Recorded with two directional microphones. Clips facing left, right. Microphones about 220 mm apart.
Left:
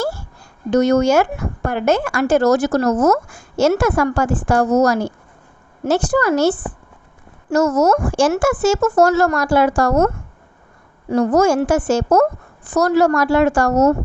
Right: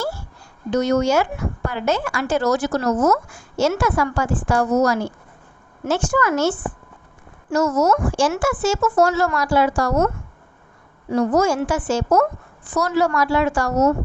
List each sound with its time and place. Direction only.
0.7 s a woman's voice: 45° left (ahead or behind)
7.5 s speech: 45° left (ahead or behind)
11.1 s speech: 50° left (ahead or behind)